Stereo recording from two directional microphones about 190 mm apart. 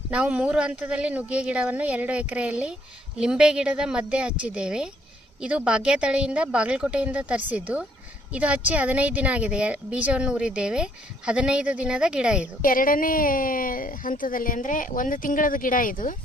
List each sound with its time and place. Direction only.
0.1 s speech: 5° right (ahead or behind)
12.6 s a woman's voice: 45° left (ahead or behind)